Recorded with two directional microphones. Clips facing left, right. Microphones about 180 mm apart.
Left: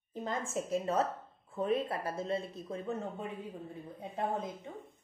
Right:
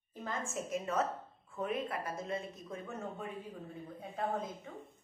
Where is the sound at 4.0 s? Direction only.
20° left (ahead or behind).